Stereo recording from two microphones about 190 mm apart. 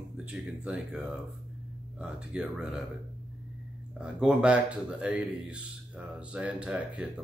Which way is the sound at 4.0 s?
5° right (ahead or behind).